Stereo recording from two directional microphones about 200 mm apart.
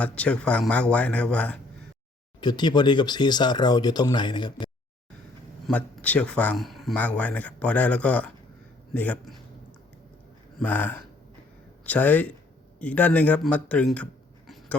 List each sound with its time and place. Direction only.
0.0 s speech: 5° left (ahead or behind)
2.4 s speech: 20° left (ahead or behind)
5.6 s a man's voice: 5° left (ahead or behind)
10.6 s speech: 10° left (ahead or behind)